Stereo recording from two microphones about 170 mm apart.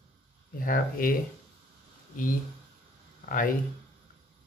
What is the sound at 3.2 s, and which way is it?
Speech, 55° left (ahead or behind).